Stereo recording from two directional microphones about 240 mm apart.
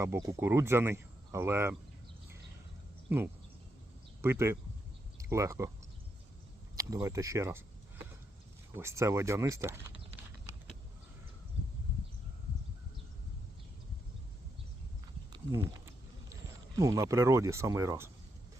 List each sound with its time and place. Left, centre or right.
0.0 s speech: centre
3.1 s speech: centre
6.7 s speech: centre
15.3 s a sound: centre
16.3 s speech: centre